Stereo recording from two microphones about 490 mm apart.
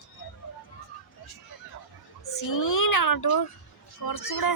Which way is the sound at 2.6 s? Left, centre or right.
Left.